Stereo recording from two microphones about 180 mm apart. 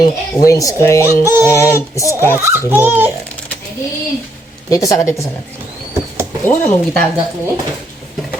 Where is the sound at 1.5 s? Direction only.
15° left (ahead or behind).